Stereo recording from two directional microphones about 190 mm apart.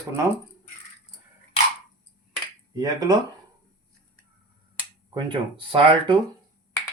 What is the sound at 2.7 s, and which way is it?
Speech, 20° right (ahead or behind).